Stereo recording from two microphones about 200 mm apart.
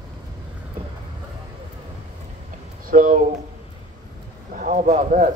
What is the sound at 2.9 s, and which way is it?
Speech, 40° right (ahead or behind).